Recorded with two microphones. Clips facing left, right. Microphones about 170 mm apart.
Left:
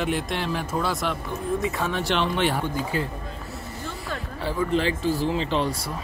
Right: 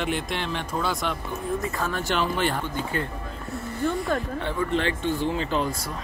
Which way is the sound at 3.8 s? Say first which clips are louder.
Right 12 dB; 60° right (ahead or behind).